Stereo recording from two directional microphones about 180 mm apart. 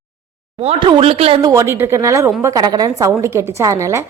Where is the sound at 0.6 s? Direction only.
30° right (ahead or behind).